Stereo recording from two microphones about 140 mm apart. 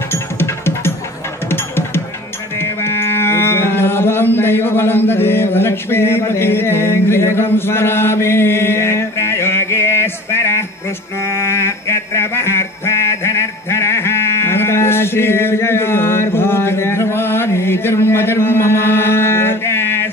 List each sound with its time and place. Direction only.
0.1 s music: 15° left (ahead or behind)
2.6 s music: 20° left (ahead or behind)
11.3 s a sound: 20° left (ahead or behind)